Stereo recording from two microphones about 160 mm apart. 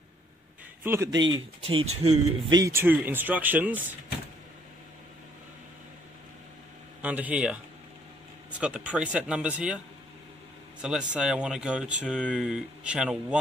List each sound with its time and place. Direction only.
0.8 s speech: 15° right (ahead or behind)
1.2 s speech: 30° right (ahead or behind)
2.6 s speech: 15° right (ahead or behind)
7.0 s speech: 10° right (ahead or behind)
10.8 s speech: 5° right (ahead or behind)